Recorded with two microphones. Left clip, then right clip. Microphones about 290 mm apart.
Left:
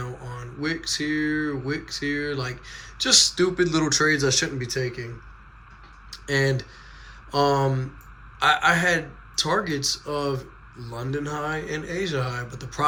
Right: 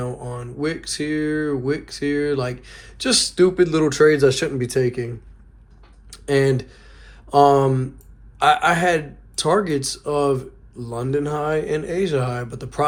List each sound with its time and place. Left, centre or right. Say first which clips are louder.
0.0 s speech: right 7 dB; centre
6.1 s speech: right 5 dB; centre